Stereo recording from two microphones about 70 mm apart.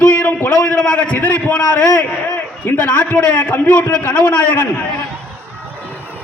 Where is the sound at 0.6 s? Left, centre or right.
Centre.